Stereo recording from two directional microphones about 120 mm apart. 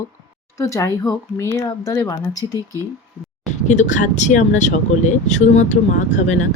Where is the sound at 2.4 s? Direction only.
25° right (ahead or behind).